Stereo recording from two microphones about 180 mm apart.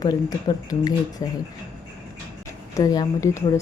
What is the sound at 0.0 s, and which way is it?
Speech, 20° left (ahead or behind).